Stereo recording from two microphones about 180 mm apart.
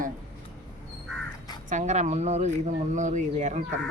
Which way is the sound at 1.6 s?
40° right (ahead or behind).